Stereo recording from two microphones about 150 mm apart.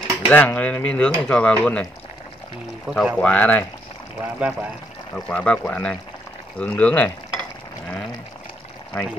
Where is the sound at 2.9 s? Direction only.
5° right (ahead or behind).